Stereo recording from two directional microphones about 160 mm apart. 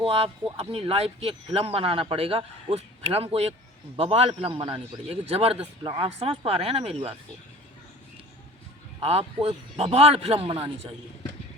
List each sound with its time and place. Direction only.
0.0 s a man's voice: 35° right (ahead or behind)
9.0 s a man's voice: 40° right (ahead or behind)